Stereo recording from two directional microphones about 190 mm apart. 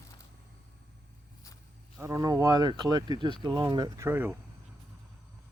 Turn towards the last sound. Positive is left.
turn(degrees=-15)  # may be behind; listen again after turning